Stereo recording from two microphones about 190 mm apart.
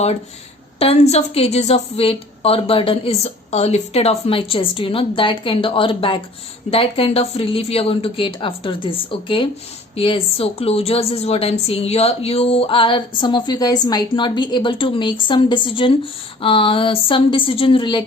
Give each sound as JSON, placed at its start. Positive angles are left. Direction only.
{"t": 0.8, "sound": "a woman's voice", "side_deg": 35}